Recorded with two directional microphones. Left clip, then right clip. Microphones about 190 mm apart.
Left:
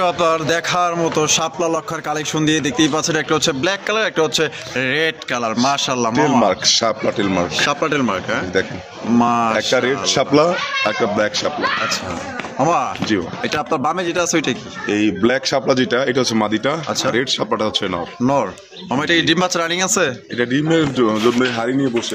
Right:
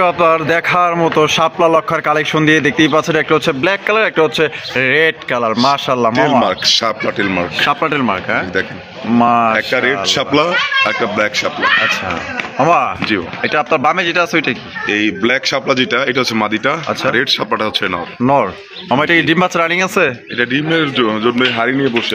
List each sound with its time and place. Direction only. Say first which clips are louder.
0.0 s a man's voice: right 5 dB; 15° right (ahead or behind)
6.4 s a man's voice: right 2 dB; 30° left (ahead or behind)
7.6 s speech: right 6 dB; 10° right (ahead or behind)
9.8 s a man's voice: right 3 dB; 35° left (ahead or behind); by 11.4 s 20° left (ahead or behind)
12.5 s a man's voice: right 5 dB; 10° right (ahead or behind)
14.9 s a man's voice: right 3 dB; 40° left (ahead or behind); by 17.9 s 15° left (ahead or behind)
18.2 s a man's voice: right 6 dB; 25° right (ahead or behind)
19.5 s speech: right 4 dB; 10° right (ahead or behind)
20.3 s a man's voice: right 2 dB; 30° left (ahead or behind)
21.4 s a man's voice: right 5 dB; 5° right (ahead or behind)